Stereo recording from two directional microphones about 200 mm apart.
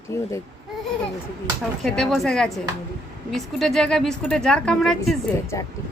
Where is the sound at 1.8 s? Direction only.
Centre (ahead or behind).